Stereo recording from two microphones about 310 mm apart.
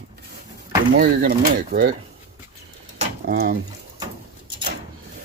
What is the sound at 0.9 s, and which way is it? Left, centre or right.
Speech, right.